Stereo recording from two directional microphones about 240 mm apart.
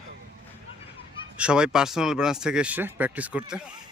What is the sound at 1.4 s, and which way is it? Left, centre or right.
Speech, centre.